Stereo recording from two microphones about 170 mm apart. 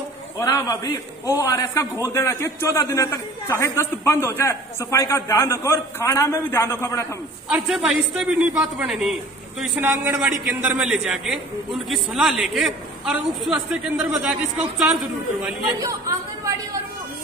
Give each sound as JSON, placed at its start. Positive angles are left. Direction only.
{"t": 0.4, "sound": "a man's voice", "side_deg": 15}
{"t": 7.4, "sound": "a man's voice", "side_deg": 0}
{"t": 15.8, "sound": "speech", "side_deg": -20}